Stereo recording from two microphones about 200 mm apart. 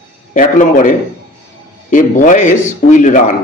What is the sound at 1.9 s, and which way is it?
A man's voice, 40° left (ahead or behind).